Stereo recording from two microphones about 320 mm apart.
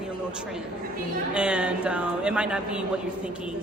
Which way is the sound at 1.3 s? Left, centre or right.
Centre.